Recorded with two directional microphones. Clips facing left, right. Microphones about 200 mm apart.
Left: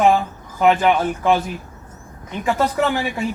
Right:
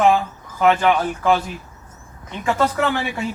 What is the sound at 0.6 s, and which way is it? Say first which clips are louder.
Speech: left 1 dB; 5° left (ahead or behind).